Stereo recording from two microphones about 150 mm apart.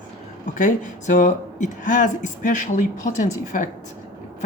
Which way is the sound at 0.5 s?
65° left (ahead or behind).